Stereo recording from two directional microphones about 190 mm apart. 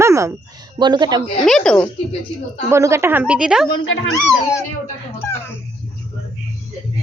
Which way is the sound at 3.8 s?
90° left.